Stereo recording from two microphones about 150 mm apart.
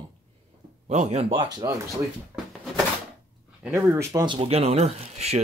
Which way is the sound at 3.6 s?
15° right (ahead or behind).